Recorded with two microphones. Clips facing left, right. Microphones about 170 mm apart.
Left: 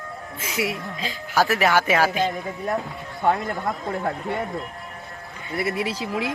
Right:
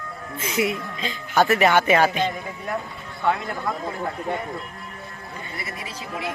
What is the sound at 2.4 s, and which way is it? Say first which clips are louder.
Speech: left 3 dB; 40° left (ahead or behind).